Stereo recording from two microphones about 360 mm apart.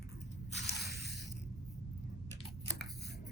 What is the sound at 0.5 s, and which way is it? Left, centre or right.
Squish, left.